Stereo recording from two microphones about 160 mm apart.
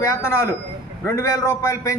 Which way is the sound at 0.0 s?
15° left (ahead or behind).